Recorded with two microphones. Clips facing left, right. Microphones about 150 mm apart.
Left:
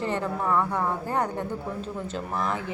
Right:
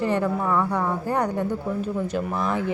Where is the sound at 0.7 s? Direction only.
5° left (ahead or behind).